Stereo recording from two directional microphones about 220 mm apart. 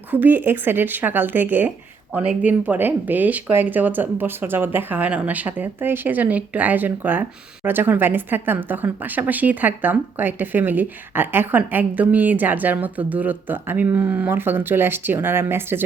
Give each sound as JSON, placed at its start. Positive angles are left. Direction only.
{"t": 0.1, "sound": "speech", "side_deg": -10}